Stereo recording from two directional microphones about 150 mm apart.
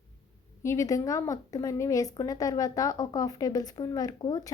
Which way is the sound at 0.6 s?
20° left (ahead or behind).